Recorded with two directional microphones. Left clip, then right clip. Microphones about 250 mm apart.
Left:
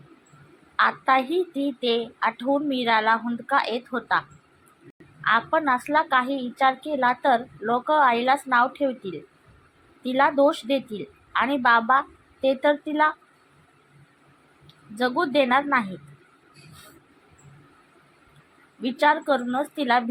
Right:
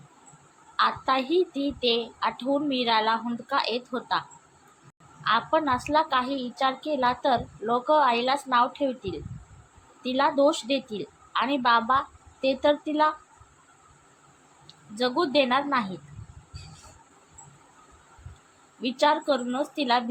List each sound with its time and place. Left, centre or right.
0.8 s a woman's voice: centre
5.2 s a woman's voice: centre
14.9 s a woman's voice: centre
18.8 s a woman's voice: centre